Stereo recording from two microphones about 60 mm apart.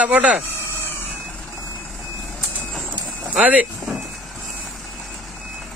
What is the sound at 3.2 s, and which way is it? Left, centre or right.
Speech, right.